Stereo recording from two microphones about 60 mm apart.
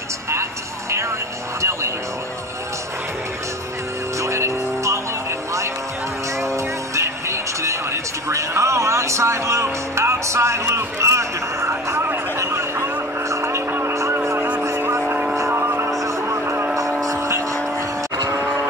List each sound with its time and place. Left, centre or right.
0.3 s music: right
1.6 s vehicle: right
4.2 s music: right
6.4 s music: right
12.4 s vehicle: right
13.7 s a sound: right
14.1 s vehicle: right
14.8 s vehicle: right
15.5 s music: right
15.9 s vehicle: right